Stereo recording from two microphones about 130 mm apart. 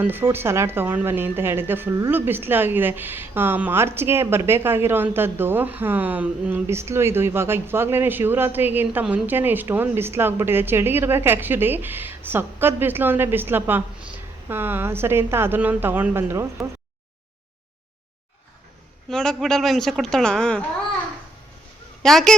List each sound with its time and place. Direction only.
0.0 s a woman's voice: 15° right (ahead or behind)
19.1 s a woman's voice: 5° left (ahead or behind)
22.0 s a woman's voice: 5° left (ahead or behind)